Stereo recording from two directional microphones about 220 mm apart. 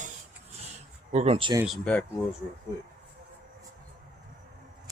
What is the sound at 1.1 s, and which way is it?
Speech, 30° right (ahead or behind).